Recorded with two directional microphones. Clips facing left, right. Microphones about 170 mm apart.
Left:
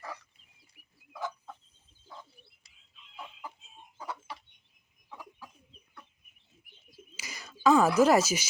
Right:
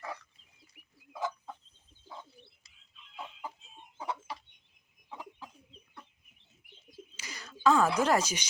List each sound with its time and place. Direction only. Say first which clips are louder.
0.7 s bird: right 3 dB; 20° right (ahead or behind)
3.9 s chicken: right 3 dB; 25° right (ahead or behind)
7.2 s speech: left 1 dB; 10° left (ahead or behind)